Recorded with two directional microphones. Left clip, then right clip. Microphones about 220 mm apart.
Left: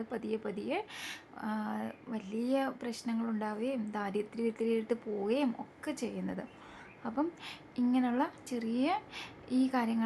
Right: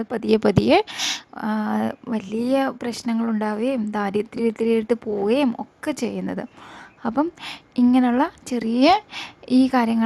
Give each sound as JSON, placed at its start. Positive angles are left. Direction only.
{"t": 0.0, "sound": "a woman's voice", "side_deg": -45}